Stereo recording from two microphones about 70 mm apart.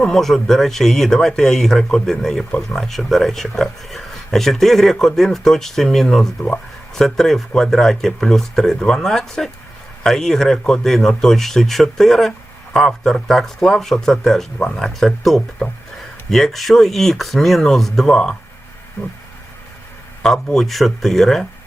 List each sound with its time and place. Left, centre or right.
0.0 s speech: centre
19.0 s a sound: centre
20.2 s speech: centre